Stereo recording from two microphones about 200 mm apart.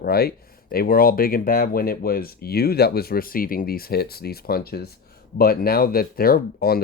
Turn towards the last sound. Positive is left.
turn(degrees=50)  # may be behind; listen again after turning